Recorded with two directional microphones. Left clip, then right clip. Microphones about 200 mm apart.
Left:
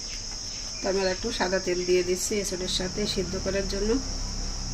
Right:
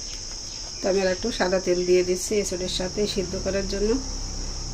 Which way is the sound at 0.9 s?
40° right (ahead or behind).